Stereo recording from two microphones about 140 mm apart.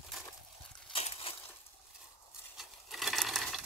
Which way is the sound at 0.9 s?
45° left (ahead or behind).